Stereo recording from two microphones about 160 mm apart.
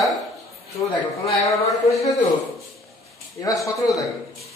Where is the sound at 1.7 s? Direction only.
20° left (ahead or behind).